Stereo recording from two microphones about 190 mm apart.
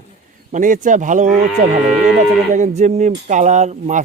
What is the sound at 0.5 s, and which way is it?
Speech, 40° right (ahead or behind).